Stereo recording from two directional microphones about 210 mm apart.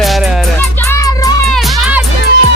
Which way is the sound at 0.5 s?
10° left (ahead or behind).